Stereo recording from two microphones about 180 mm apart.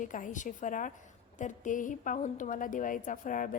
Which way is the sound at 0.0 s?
45° left (ahead or behind).